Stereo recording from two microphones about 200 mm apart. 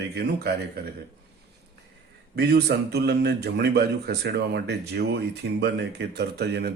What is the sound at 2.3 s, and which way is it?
A man's voice, 55° right (ahead or behind).